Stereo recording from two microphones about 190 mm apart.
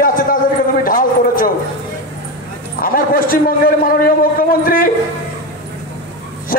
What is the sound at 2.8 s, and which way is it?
A man's voice, 50° left (ahead or behind).